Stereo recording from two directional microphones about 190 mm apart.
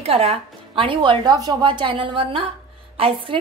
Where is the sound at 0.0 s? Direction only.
30° right (ahead or behind).